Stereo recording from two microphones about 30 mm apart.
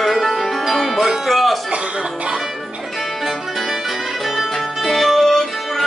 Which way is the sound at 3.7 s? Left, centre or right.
Centre.